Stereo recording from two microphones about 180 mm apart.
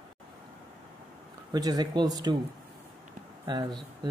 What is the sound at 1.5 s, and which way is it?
Speech, 20° right (ahead or behind).